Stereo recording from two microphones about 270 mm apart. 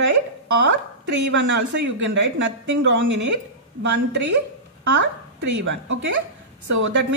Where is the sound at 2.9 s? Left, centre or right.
Right.